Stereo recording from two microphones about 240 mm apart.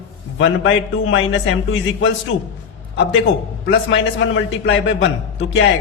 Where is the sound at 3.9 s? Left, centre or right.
Left.